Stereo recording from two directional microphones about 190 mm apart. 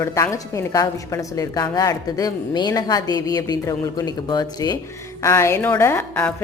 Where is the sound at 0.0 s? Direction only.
15° left (ahead or behind).